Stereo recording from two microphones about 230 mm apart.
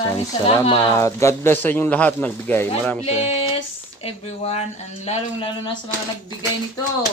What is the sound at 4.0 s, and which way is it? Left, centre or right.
Speech, left.